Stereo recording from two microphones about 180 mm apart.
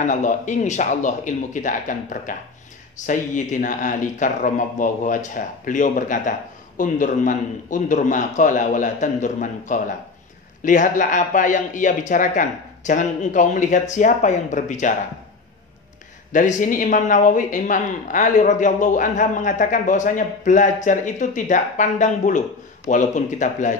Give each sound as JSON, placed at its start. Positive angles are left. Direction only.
{"t": 0.0, "sound": "speech", "side_deg": 45}
{"t": 16.3, "sound": "speech", "side_deg": 45}